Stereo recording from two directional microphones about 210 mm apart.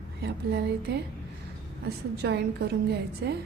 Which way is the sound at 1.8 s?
50° right (ahead or behind).